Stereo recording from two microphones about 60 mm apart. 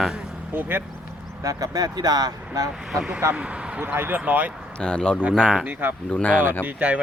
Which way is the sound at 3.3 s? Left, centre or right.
Centre.